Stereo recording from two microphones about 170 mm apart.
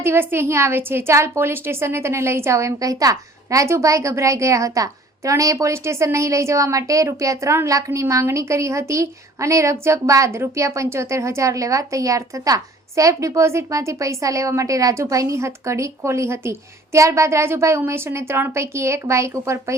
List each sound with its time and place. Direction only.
0.0 s a woman's voice: 15° right (ahead or behind)